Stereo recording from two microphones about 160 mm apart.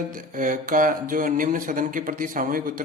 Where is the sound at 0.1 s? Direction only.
55° right (ahead or behind).